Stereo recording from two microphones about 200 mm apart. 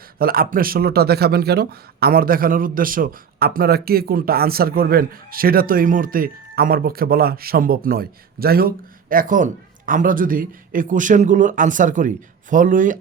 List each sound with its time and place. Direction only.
0.2 s speech: 45° right (ahead or behind)